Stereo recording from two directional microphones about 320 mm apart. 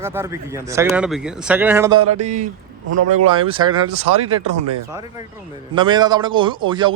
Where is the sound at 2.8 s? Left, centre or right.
Right.